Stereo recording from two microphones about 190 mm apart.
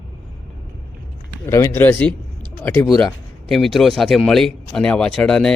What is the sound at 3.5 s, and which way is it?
Speech, centre (ahead or behind).